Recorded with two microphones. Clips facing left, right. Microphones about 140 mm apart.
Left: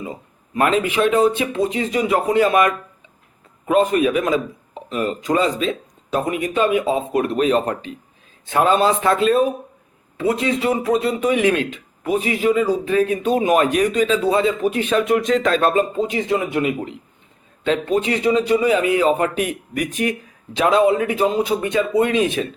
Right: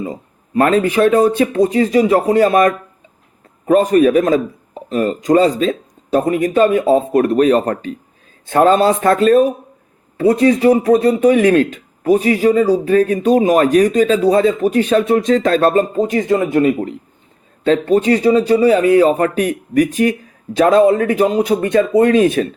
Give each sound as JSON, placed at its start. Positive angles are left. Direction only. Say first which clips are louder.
{"t": 0.0, "sound": "speech", "louder": "right 6 dB", "side_deg": -35}